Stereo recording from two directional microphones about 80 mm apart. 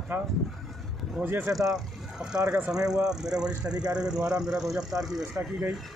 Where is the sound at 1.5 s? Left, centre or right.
Centre.